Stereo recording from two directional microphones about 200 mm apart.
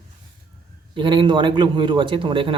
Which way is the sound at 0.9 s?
25° right (ahead or behind).